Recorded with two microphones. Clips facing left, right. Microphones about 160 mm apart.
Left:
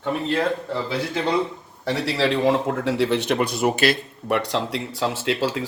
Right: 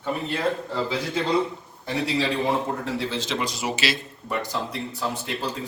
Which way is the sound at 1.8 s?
80° left.